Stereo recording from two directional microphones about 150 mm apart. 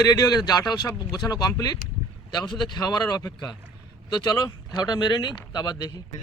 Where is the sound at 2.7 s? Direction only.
25° left (ahead or behind).